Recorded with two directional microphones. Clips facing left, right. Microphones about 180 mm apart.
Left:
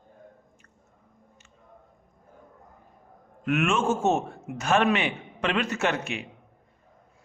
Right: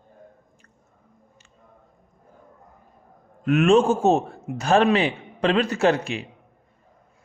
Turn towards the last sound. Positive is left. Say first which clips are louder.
# right 7 dB
turn(degrees=-35)  # may be behind; listen again after turning